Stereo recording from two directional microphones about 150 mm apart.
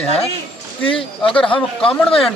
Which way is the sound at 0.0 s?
40° left (ahead or behind).